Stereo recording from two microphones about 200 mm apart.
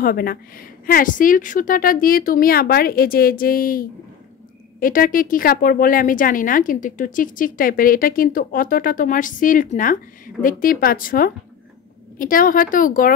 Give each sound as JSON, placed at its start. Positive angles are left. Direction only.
{"t": 0.0, "sound": "speech", "side_deg": 45}